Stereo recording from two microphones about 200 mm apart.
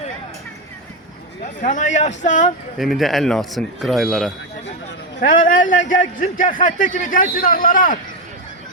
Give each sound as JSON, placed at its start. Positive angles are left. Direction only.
{"t": 1.5, "sound": "a man's voice", "side_deg": 40}
{"t": 2.7, "sound": "speech", "side_deg": 0}
{"t": 5.2, "sound": "a man's voice", "side_deg": 40}